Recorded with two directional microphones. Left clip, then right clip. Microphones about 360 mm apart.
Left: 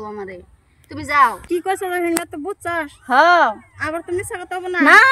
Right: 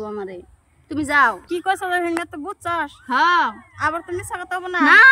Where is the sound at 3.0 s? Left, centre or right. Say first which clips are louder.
Left 5 dB; centre.